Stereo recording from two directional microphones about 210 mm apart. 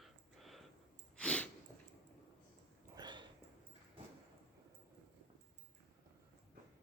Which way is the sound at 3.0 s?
20° right (ahead or behind).